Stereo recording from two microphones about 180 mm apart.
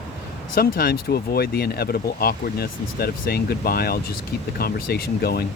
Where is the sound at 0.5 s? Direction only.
55° left (ahead or behind).